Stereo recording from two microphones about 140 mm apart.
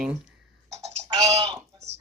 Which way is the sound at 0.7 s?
50° right (ahead or behind).